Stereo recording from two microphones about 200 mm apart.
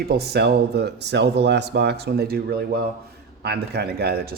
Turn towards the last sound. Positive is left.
turn(degrees=-55)  # may be behind; listen again after turning